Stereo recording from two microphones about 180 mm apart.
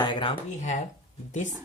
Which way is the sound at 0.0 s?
30° left (ahead or behind).